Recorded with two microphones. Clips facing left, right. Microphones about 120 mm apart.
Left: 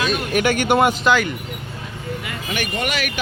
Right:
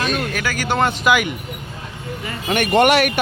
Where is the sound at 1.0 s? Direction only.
10° right (ahead or behind).